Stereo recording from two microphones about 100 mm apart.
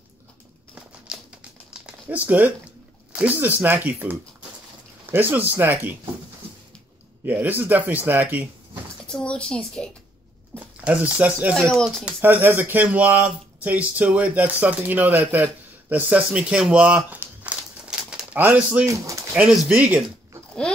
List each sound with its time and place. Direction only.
0.7 s patter: 10° right (ahead or behind)
1.7 s a sound: 15° right (ahead or behind)
3.1 s speech: 15° right (ahead or behind)
7.2 s speech: 20° right (ahead or behind)
9.0 s a woman's voice: 10° left (ahead or behind)
10.8 s speech: 10° right (ahead or behind)
11.5 s speech: 5° left (ahead or behind)
12.0 s speech: 15° right (ahead or behind)
17.8 s bird: 5° right (ahead or behind)
18.9 s speech: 30° right (ahead or behind)
19.5 s speech: 5° right (ahead or behind)